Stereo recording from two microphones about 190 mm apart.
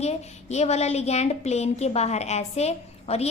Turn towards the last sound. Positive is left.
turn(degrees=35)  # may be behind; listen again after turning